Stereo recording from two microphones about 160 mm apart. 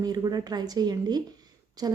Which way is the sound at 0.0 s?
25° right (ahead or behind).